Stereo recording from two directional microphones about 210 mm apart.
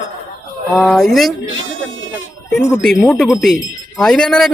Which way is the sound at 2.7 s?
5° left (ahead or behind).